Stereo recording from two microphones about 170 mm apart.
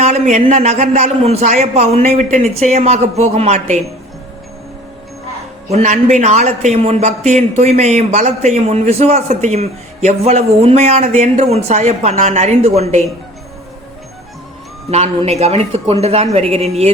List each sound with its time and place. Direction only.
0.0 s a man's voice: 45° right (ahead or behind)
5.7 s a man's voice: 45° right (ahead or behind)
14.8 s a man's voice: 40° right (ahead or behind)